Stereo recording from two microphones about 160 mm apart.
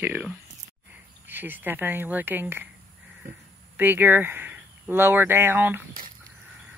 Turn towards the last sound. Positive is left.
turn(degrees=-15)  # may be behind; listen again after turning